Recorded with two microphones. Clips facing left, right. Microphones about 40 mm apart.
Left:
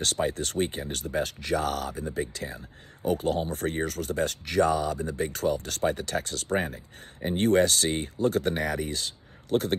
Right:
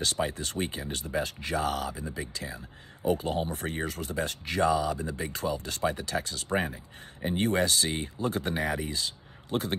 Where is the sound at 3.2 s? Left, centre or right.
Right.